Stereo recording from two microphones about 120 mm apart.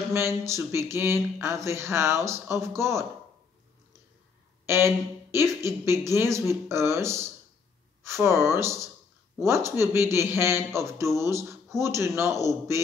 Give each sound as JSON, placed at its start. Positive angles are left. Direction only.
{"t": 0.1, "sound": "speech", "side_deg": -20}
{"t": 4.6, "sound": "speech", "side_deg": -20}